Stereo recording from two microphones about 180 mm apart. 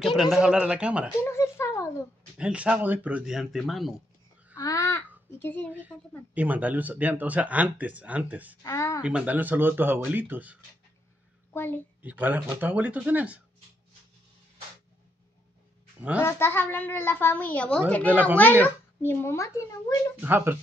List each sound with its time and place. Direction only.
0.0 s speech: centre (ahead or behind)
1.2 s a sound: 15° left (ahead or behind)
2.3 s speech: 5° right (ahead or behind)
4.6 s babbling: 20° left (ahead or behind)
5.9 s speech: 5° left (ahead or behind)
6.3 s speech: 10° right (ahead or behind)
8.6 s a woman's voice: 15° left (ahead or behind)
9.0 s speech: 5° right (ahead or behind)
11.5 s a child's voice: 10° left (ahead or behind)
12.0 s speech: 10° right (ahead or behind)
16.2 s a woman's voice: 15° left (ahead or behind)
20.2 s speech: 10° right (ahead or behind)